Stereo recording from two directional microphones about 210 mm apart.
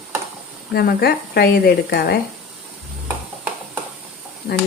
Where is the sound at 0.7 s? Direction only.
50° left (ahead or behind).